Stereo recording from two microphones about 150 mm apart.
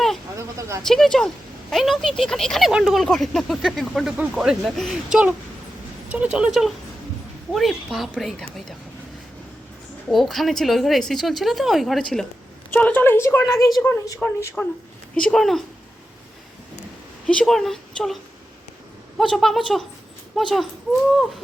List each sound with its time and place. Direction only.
0.8 s speech: 5° left (ahead or behind)
10.1 s speech: centre (ahead or behind)
12.7 s a woman's voice: 15° left (ahead or behind)
14.6 s a woman's voice: 10° left (ahead or behind)
17.2 s speech: 5° left (ahead or behind)